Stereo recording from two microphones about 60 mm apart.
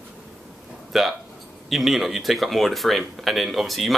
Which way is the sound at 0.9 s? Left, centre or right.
Centre.